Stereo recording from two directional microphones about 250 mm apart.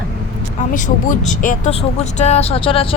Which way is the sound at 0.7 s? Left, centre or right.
Left.